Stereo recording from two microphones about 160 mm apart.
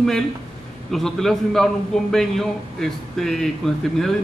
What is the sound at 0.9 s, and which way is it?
A man's voice, centre (ahead or behind).